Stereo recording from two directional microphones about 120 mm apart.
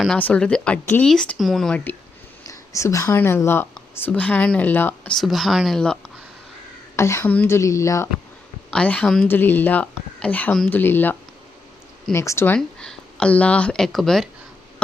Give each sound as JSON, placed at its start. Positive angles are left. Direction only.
{"t": 0.1, "sound": "speech", "side_deg": 10}
{"t": 2.5, "sound": "a sound", "side_deg": 25}
{"t": 3.2, "sound": "speech", "side_deg": 20}
{"t": 5.1, "sound": "speech", "side_deg": 0}
{"t": 6.9, "sound": "speech", "side_deg": 25}
{"t": 8.7, "sound": "speech", "side_deg": 10}
{"t": 12.5, "sound": "speech", "side_deg": 5}